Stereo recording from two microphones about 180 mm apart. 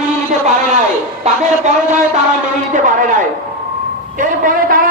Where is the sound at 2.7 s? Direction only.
45° right (ahead or behind).